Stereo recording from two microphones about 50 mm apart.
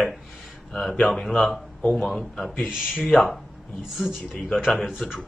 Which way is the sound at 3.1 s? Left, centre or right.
Centre.